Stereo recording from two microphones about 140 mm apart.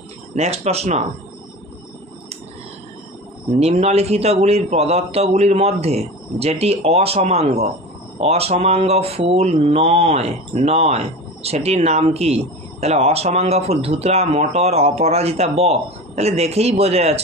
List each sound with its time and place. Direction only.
0.3 s speech: 50° right (ahead or behind)
3.5 s speech: 50° right (ahead or behind)